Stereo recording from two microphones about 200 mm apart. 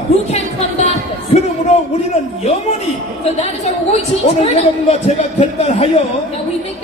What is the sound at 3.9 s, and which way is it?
Speech, 30° left (ahead or behind).